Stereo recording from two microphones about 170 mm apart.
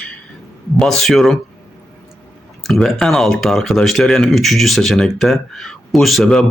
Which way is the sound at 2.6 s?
Centre (ahead or behind).